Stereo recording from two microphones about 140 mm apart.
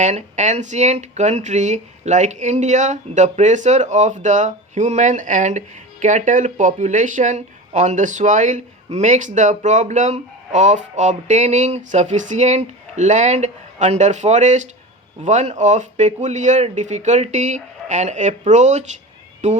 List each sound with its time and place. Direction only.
0.0 s speech: 55° right (ahead or behind)